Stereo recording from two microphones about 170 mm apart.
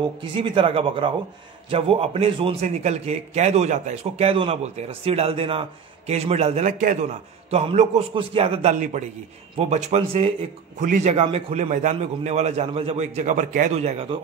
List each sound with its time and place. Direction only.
0.2 s a man's voice: 30° right (ahead or behind)
8.7 s a man's voice: 50° right (ahead or behind)
10.8 s a man's voice: 45° right (ahead or behind)